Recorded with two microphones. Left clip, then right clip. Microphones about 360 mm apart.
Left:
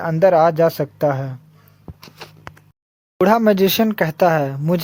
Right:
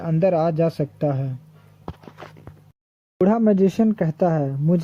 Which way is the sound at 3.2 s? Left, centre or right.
Left.